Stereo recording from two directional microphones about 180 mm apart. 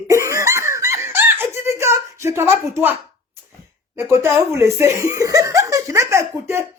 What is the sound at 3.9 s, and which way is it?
Speech, 15° right (ahead or behind).